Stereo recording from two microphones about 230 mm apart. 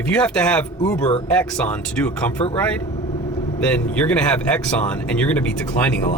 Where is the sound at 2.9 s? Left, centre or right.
Centre.